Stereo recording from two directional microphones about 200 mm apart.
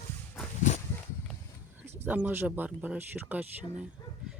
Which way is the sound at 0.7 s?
40° left (ahead or behind).